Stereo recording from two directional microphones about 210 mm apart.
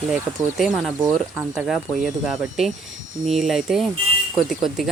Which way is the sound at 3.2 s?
Centre (ahead or behind).